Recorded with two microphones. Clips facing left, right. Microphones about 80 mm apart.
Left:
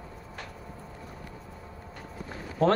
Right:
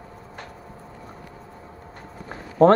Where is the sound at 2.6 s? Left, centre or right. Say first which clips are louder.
Right 9 dB; right.